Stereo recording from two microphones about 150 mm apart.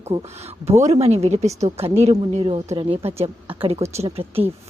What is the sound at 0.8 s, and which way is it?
A woman's voice, 45° right (ahead or behind).